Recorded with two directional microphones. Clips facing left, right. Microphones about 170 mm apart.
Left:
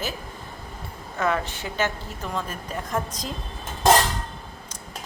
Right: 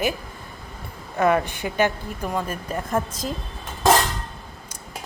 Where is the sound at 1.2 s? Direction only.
15° right (ahead or behind).